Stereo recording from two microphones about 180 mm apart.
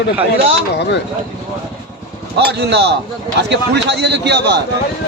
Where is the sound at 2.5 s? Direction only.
70° right (ahead or behind).